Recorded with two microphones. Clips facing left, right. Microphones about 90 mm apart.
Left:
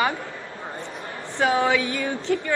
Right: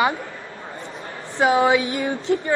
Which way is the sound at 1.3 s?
20° right (ahead or behind).